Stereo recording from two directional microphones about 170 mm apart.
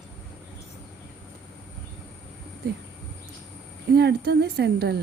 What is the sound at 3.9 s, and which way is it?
A woman's voice, 75° right (ahead or behind).